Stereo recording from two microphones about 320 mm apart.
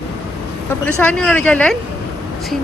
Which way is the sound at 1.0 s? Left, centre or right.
Centre.